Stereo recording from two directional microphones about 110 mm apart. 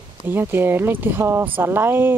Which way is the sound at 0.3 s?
20° right (ahead or behind).